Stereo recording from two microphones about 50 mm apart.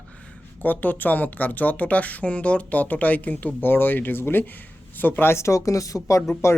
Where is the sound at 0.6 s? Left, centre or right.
Left.